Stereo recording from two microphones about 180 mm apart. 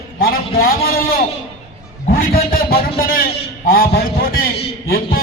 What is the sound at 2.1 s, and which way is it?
A man's voice, 55° left (ahead or behind).